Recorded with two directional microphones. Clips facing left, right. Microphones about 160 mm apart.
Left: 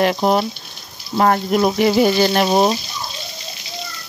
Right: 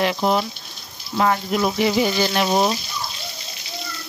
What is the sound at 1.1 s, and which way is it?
Frying, 45° left (ahead or behind).